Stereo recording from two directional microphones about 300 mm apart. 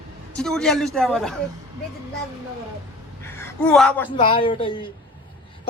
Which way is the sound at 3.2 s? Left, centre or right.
Centre.